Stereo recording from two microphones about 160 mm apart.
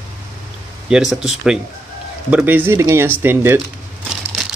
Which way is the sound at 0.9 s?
5° right (ahead or behind).